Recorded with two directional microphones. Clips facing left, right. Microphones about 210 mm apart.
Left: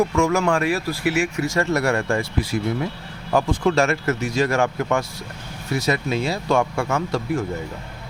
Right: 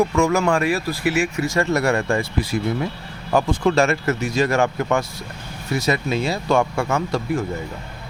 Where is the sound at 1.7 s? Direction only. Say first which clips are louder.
Right 2 dB; 20° right (ahead or behind).